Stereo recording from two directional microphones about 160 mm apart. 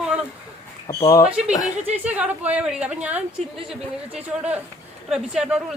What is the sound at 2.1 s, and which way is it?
A woman's voice, 10° right (ahead or behind).